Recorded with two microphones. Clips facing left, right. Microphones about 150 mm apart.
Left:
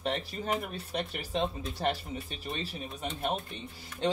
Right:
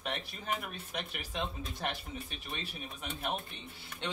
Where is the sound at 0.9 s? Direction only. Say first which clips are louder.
Left 7 dB; 35° left (ahead or behind).